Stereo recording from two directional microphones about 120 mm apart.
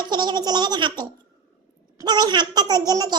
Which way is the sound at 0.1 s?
35° right (ahead or behind).